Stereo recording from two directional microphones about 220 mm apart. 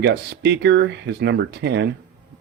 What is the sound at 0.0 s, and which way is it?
Speech, 50° right (ahead or behind).